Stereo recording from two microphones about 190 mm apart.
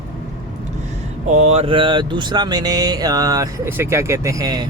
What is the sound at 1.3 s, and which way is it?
Speech, 35° right (ahead or behind).